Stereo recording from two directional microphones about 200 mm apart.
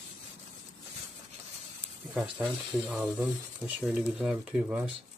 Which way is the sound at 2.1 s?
5° right (ahead or behind).